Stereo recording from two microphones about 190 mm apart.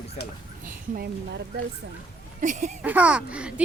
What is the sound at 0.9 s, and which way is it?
Speech, 55° right (ahead or behind).